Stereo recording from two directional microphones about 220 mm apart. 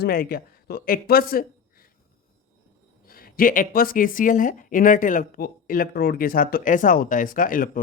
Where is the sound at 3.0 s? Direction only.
40° left (ahead or behind).